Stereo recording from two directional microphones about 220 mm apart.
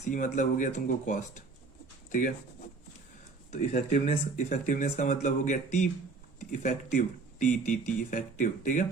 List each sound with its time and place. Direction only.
0.1 s speech: 35° left (ahead or behind)
3.5 s speech: 30° left (ahead or behind)